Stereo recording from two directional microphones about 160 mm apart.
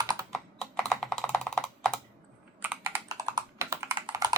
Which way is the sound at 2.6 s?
10° right (ahead or behind).